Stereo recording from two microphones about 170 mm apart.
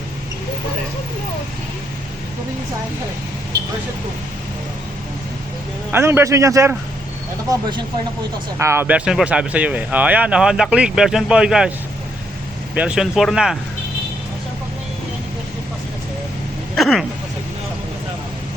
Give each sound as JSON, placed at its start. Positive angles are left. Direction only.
{"t": 3.5, "sound": "vehicle", "side_deg": -75}
{"t": 5.9, "sound": "a man's voice", "side_deg": -15}
{"t": 8.5, "sound": "speech", "side_deg": -15}
{"t": 12.7, "sound": "speech", "side_deg": -5}
{"t": 16.7, "sound": "a sound", "side_deg": 0}